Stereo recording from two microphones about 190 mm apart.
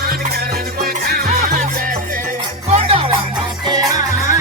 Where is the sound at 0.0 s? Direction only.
55° right (ahead or behind).